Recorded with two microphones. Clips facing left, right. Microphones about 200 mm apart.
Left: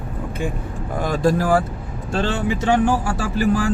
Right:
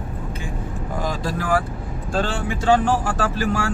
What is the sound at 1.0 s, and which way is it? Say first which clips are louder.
Speech: left 8 dB; 60° left (ahead or behind).